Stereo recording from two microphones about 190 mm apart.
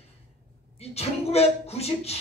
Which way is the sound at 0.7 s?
35° left (ahead or behind).